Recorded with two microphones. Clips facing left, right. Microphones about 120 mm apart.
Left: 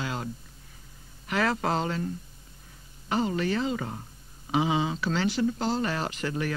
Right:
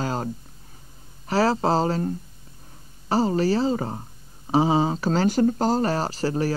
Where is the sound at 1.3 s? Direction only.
30° right (ahead or behind).